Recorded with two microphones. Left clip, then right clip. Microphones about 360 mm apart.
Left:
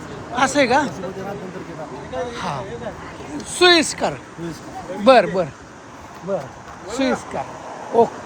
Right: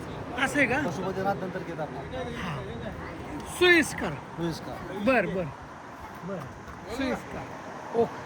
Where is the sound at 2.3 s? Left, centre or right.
Centre.